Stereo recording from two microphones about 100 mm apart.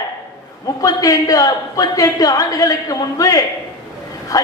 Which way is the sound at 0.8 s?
35° left (ahead or behind).